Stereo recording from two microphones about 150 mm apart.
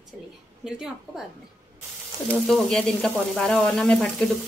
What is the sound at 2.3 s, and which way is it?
Speech, 5° left (ahead or behind).